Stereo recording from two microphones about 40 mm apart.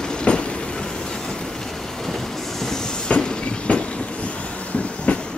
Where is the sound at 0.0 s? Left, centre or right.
Left.